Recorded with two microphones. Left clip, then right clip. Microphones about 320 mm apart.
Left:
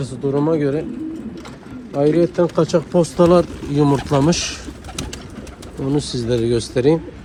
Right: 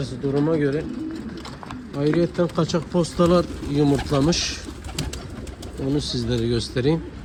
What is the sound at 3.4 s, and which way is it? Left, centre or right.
Speech, left.